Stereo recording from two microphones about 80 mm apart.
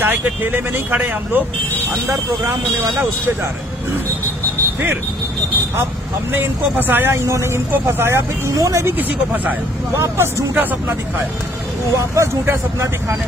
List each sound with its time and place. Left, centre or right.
0.0 s speech: right
2.0 s speech: right
6.9 s speech: right
7.2 s speech: right
8.9 s speech: right
9.9 s speech: right
12.2 s speech: right